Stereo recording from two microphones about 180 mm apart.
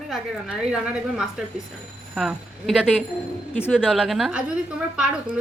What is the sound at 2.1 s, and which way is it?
A woman's voice, 5° right (ahead or behind).